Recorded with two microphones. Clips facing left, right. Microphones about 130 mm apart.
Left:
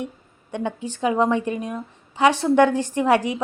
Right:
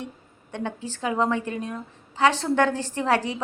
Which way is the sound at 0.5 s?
15° left (ahead or behind).